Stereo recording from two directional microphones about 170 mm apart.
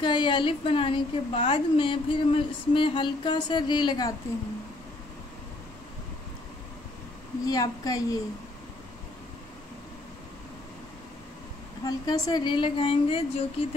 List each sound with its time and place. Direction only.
0.0 s a woman's voice: 25° left (ahead or behind)
7.4 s a woman's voice: 20° left (ahead or behind)
11.8 s a woman's voice: 25° left (ahead or behind)
13.6 s a sound: 35° left (ahead or behind)